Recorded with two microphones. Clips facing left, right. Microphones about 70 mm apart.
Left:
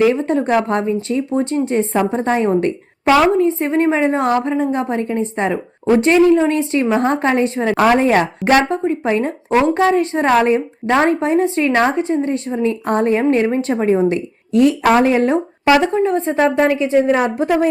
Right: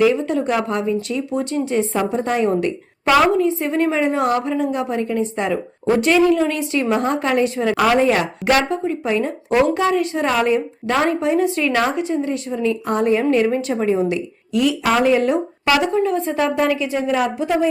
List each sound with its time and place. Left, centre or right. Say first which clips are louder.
0.1 s speech: left 3 dB; left